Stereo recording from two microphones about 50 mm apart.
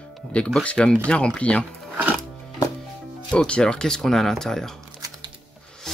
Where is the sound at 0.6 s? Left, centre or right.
Left.